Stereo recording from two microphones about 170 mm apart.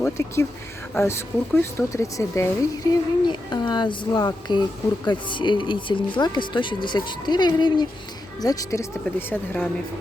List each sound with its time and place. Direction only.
0.0 s speech: 15° left (ahead or behind)